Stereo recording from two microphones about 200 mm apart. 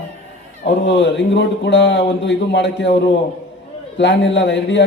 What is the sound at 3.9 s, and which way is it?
Speech, 60° left (ahead or behind).